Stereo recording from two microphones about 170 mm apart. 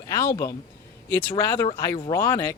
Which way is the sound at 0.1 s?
20° left (ahead or behind).